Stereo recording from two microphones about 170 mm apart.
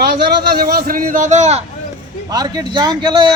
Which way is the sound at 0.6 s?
60° right (ahead or behind).